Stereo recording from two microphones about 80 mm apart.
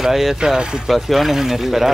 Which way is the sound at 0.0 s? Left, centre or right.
Centre.